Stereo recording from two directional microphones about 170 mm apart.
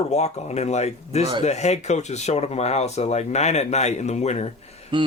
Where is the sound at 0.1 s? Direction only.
40° left (ahead or behind).